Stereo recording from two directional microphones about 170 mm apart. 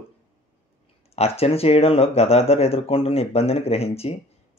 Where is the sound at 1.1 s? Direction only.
35° left (ahead or behind).